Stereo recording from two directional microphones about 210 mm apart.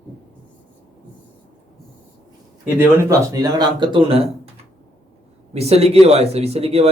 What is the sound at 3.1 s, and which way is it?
Speech, 15° right (ahead or behind).